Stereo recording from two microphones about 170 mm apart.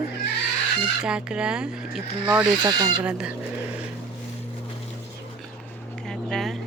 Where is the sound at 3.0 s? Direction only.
5° right (ahead or behind).